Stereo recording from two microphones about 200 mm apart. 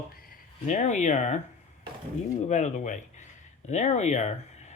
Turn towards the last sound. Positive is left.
turn(degrees=35)  # may be behind; listen again after turning